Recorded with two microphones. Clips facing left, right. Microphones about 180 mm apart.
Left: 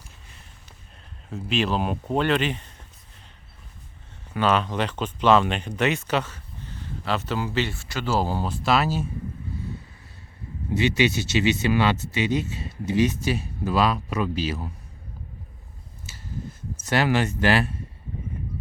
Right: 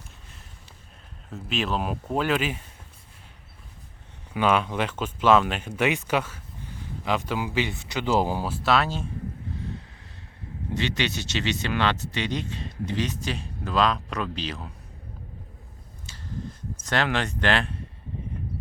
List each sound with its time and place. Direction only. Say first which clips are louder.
1.3 s speech: left 3 dB; centre (ahead or behind)
4.4 s speech: left 1 dB; 10° right (ahead or behind)
10.8 s speech: left 6 dB; 10° left (ahead or behind)
16.1 s a sound: even; 5° left (ahead or behind)
16.8 s speech: left 4 dB; 5° left (ahead or behind)